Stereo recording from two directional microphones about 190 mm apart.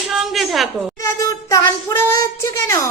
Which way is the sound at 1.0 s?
15° left (ahead or behind).